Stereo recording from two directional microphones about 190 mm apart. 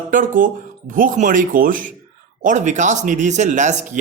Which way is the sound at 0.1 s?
45° right (ahead or behind).